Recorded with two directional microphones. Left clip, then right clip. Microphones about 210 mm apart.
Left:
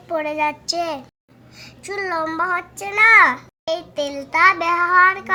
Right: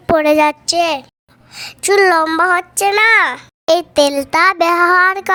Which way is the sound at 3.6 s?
50° right (ahead or behind).